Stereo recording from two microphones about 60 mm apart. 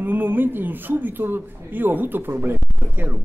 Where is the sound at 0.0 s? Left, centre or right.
Right.